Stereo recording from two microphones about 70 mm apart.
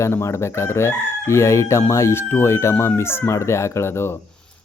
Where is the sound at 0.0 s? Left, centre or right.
Left.